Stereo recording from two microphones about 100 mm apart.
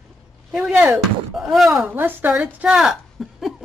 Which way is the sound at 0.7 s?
15° right (ahead or behind).